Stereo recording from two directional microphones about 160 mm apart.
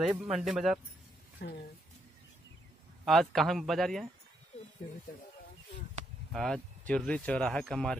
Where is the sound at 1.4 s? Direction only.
80° left.